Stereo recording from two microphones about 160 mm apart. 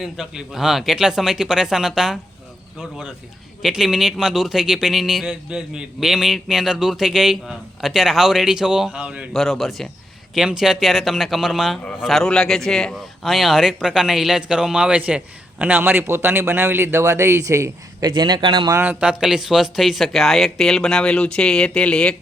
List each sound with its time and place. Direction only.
0.0 s speech: centre (ahead or behind)
3.6 s speech: centre (ahead or behind); by 18.7 s 30° right (ahead or behind)
18.7 s speech: 10° right (ahead or behind); by 22.1 s 5° left (ahead or behind)